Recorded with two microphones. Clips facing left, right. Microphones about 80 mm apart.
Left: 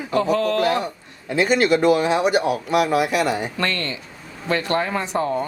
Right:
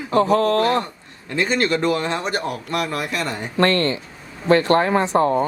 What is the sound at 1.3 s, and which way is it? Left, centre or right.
Speech, centre.